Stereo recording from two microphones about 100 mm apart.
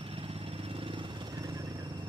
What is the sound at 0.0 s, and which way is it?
Vehicle, 70° right (ahead or behind).